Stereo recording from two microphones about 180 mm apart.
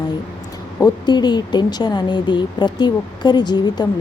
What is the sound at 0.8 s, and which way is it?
Speech, 25° left (ahead or behind).